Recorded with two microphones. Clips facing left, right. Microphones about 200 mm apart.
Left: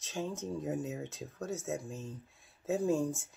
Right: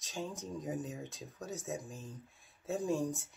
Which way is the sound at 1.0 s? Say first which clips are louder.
Left 5 dB; 15° right (ahead or behind).